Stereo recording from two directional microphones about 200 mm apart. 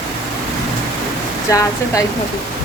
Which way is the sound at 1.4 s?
15° left (ahead or behind).